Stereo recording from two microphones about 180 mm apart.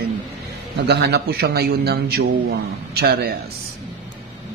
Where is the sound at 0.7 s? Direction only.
70° right (ahead or behind).